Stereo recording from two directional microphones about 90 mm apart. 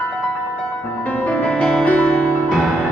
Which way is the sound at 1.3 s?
15° left (ahead or behind).